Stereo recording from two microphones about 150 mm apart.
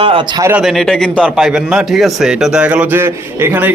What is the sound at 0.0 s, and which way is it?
Speech, 40° right (ahead or behind).